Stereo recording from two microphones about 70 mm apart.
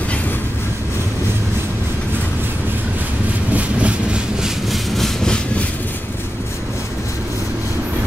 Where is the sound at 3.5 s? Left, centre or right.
Centre.